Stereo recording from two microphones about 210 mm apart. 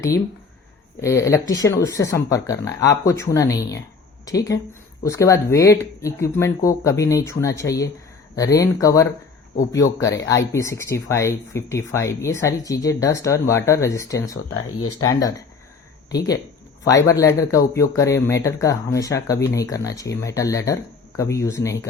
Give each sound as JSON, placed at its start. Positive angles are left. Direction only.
{"t": 1.0, "sound": "speech", "side_deg": 15}
{"t": 14.5, "sound": "speech", "side_deg": 90}
{"t": 15.0, "sound": "speech", "side_deg": 15}